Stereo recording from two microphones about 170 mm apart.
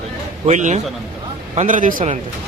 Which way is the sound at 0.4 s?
45° right (ahead or behind).